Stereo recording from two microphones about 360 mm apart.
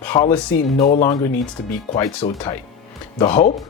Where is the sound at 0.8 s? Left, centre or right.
Left.